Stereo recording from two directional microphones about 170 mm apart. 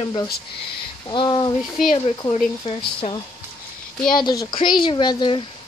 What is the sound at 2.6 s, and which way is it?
Speech, 35° left (ahead or behind).